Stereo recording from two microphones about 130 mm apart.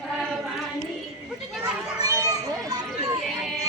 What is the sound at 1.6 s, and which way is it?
Children playing, 25° right (ahead or behind).